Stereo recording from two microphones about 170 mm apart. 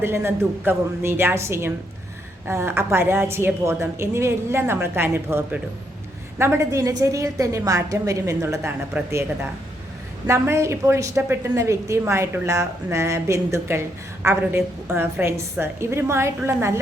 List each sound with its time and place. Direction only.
0.0 s a woman's voice: 15° right (ahead or behind)